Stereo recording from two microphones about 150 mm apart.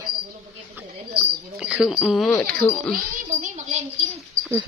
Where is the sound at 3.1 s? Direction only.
55° right (ahead or behind).